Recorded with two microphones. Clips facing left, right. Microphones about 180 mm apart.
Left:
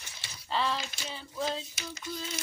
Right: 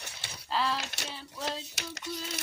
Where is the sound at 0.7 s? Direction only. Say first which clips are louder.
Even; 70° right (ahead or behind).